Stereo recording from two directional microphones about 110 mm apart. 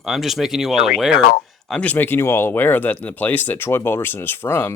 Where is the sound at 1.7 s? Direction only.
10° left (ahead or behind).